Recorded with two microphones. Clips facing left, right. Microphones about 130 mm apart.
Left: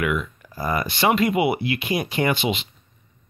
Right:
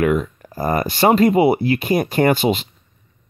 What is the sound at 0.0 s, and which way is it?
Speech, 40° right (ahead or behind).